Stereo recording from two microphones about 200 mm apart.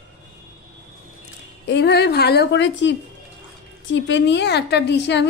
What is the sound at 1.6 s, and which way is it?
A woman's voice, 55° left (ahead or behind).